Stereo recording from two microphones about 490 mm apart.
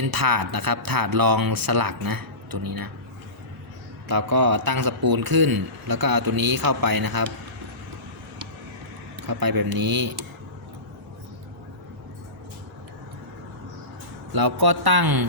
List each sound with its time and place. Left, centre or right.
0.0 s a man's voice: right
4.1 s a man's voice: right
9.2 s a man's voice: right
14.3 s a man's voice: right